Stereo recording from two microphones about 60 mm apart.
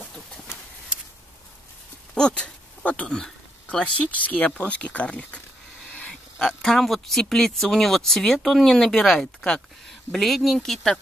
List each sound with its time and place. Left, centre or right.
2.1 s speech: centre
6.4 s speech: centre